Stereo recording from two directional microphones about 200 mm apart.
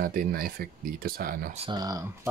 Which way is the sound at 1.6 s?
20° right (ahead or behind).